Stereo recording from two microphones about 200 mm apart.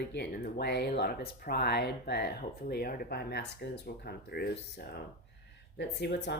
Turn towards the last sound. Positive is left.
turn(degrees=55)  # may be behind; listen again after turning